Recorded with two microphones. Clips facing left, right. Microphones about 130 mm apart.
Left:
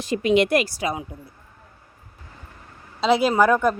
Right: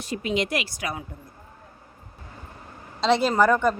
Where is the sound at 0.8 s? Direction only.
20° left (ahead or behind).